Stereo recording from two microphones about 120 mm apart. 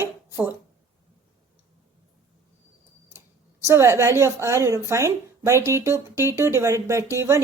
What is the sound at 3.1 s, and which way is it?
Speech, 25° right (ahead or behind).